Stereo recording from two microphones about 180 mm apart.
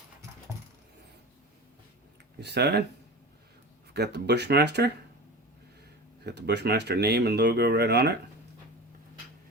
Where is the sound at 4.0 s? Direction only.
65° right (ahead or behind).